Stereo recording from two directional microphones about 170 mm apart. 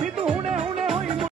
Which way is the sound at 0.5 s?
35° right (ahead or behind).